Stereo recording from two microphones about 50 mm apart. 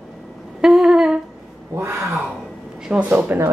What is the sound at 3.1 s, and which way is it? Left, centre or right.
Speech, right.